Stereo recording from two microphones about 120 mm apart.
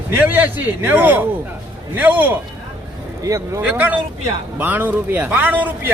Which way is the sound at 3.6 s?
15° right (ahead or behind).